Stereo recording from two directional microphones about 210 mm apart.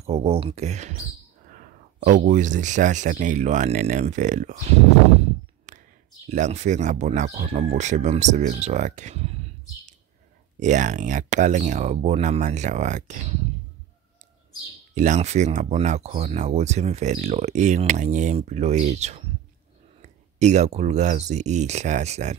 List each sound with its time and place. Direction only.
0.0 s speech: 30° right (ahead or behind)
5.7 s a sound: 35° right (ahead or behind)
6.2 s speech: 35° right (ahead or behind)
10.6 s speech: 35° right (ahead or behind)
15.0 s speech: 35° right (ahead or behind)